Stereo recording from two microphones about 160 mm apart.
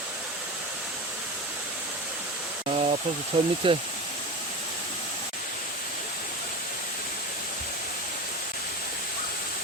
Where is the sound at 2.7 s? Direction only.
40° right (ahead or behind).